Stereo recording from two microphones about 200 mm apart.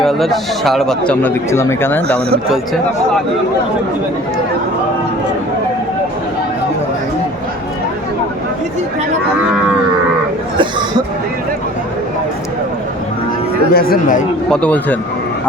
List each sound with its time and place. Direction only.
0.0 s speech: centre (ahead or behind)
13.7 s speech: 50° left (ahead or behind)
14.5 s speech: 5° left (ahead or behind)